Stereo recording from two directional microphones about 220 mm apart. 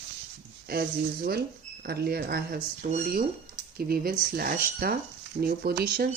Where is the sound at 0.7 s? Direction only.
45° right (ahead or behind).